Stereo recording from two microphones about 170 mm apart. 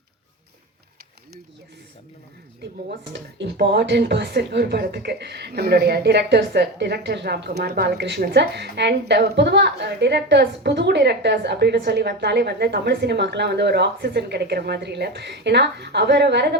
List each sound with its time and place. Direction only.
3.0 s speech: 90° right